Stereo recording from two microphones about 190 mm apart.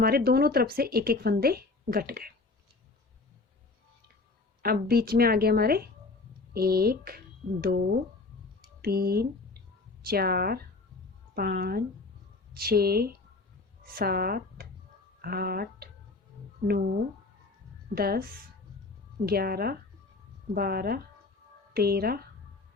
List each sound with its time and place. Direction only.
0.0 s a woman's voice: 55° right (ahead or behind)
4.6 s a woman's voice: 55° right (ahead or behind)
8.8 s a woman's voice: 55° right (ahead or behind)